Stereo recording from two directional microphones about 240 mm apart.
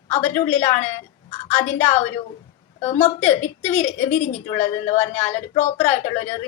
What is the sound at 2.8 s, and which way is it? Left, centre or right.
A woman's voice, left.